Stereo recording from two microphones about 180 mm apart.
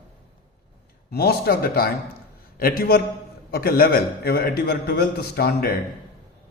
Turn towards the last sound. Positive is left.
turn(degrees=60)  # may be behind; listen again after turning